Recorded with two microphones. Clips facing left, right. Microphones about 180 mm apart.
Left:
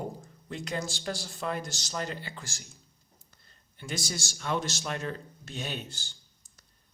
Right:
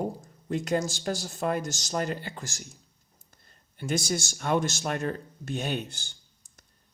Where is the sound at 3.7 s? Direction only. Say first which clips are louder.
Right 7 dB; 50° right (ahead or behind).